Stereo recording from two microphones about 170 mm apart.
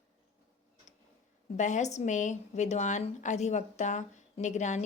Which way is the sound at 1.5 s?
45° left (ahead or behind).